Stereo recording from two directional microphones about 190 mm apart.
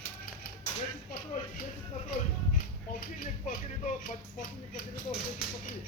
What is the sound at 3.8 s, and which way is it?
Speech, 45° left (ahead or behind).